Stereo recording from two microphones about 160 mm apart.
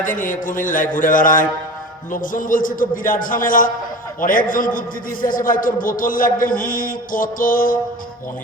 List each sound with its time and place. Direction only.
0.0 s a man's voice: 55° left (ahead or behind)